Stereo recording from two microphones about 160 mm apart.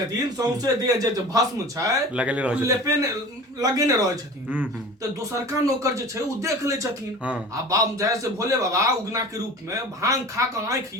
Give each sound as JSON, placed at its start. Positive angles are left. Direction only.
{"t": 0.3, "sound": "a man's voice", "side_deg": -20}
{"t": 2.1, "sound": "speech", "side_deg": -10}
{"t": 2.6, "sound": "a man's voice", "side_deg": -20}
{"t": 4.4, "sound": "a man's voice", "side_deg": -10}